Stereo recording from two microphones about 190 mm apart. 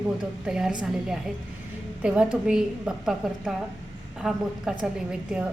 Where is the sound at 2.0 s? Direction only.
5° right (ahead or behind).